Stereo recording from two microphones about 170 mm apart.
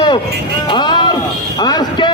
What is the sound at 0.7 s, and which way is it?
Vehicle, 25° left (ahead or behind).